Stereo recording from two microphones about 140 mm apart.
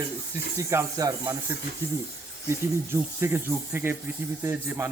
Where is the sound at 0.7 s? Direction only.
20° right (ahead or behind).